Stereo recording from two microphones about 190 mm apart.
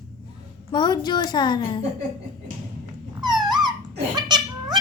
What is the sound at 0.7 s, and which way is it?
A woman's voice, 20° left (ahead or behind).